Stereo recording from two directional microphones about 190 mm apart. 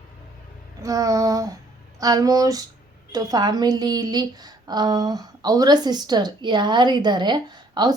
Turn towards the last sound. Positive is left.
turn(degrees=-20)  # may be behind; listen again after turning